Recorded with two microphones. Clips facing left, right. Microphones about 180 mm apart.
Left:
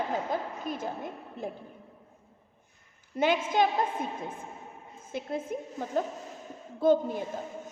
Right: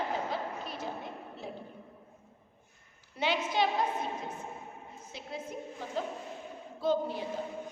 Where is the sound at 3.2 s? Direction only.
50° left (ahead or behind).